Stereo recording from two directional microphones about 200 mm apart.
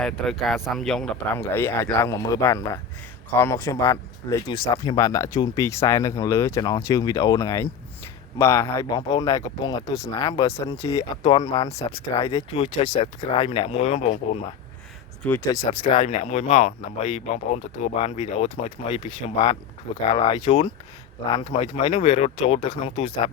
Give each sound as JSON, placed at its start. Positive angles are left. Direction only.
{"t": 0.0, "sound": "speech", "side_deg": 0}
{"t": 10.8, "sound": "speech", "side_deg": 30}
{"t": 16.0, "sound": "speech", "side_deg": 35}